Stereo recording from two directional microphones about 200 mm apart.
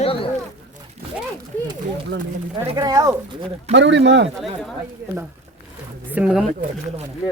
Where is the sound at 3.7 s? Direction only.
65° right (ahead or behind).